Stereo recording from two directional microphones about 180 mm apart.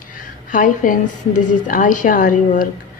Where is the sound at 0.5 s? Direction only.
50° left (ahead or behind).